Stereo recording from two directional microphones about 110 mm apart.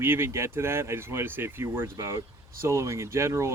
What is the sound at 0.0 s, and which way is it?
Speech, 20° right (ahead or behind).